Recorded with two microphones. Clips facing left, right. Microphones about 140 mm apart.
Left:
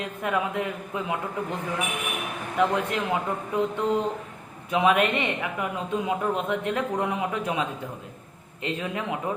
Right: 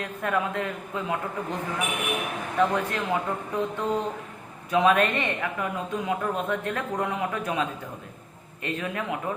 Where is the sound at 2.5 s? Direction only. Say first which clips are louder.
Left 1 dB; 15° left (ahead or behind).